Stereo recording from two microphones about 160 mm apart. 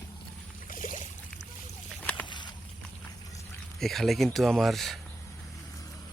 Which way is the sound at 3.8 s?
Centre (ahead or behind).